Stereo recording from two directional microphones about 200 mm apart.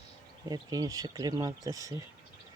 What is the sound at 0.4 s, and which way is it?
Speech, 20° right (ahead or behind).